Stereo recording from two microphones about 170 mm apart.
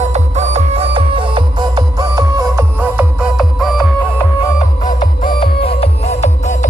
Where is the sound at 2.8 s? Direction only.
10° right (ahead or behind).